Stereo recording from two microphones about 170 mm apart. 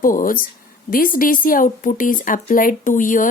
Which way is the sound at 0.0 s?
55° left (ahead or behind).